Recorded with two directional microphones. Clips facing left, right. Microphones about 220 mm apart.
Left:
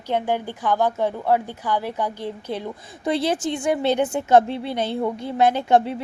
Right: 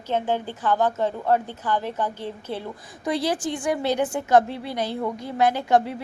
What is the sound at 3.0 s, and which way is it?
A woman's voice, 25° left (ahead or behind).